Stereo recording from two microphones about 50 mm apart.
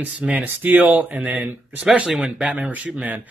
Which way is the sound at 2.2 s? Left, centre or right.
Centre.